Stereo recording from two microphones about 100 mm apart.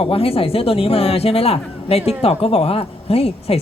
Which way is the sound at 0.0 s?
70° left (ahead or behind).